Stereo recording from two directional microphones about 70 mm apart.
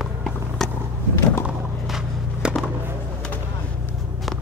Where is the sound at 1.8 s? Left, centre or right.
Centre.